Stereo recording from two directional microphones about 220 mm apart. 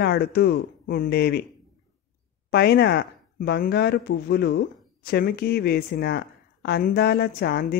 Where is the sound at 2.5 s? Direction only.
45° left (ahead or behind).